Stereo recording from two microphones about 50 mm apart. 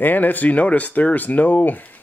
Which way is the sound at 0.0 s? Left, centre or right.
Left.